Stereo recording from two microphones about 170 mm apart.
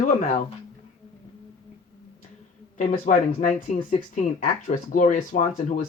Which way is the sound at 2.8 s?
50° left (ahead or behind).